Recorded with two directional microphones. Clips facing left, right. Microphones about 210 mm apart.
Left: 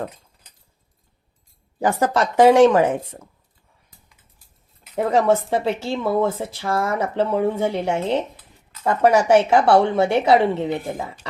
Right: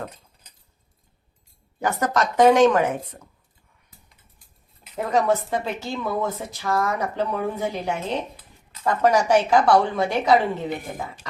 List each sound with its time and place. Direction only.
1.8 s speech: 30° left (ahead or behind)
5.1 s speech: 30° left (ahead or behind)